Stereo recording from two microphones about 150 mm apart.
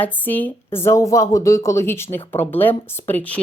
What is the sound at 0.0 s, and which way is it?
A woman's voice, 10° left (ahead or behind).